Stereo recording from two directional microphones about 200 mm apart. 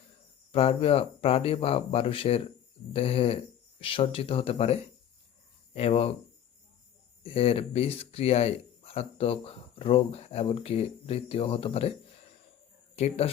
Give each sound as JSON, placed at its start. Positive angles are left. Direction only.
{"t": 0.5, "sound": "speech", "side_deg": 30}
{"t": 7.2, "sound": "speech", "side_deg": 30}
{"t": 13.0, "sound": "speech", "side_deg": 30}